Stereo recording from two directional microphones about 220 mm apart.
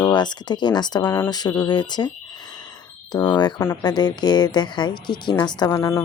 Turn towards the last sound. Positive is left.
turn(degrees=15)  # may be behind; listen again after turning